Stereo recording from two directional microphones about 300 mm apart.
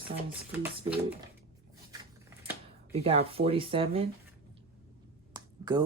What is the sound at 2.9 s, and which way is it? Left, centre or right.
Speech, centre.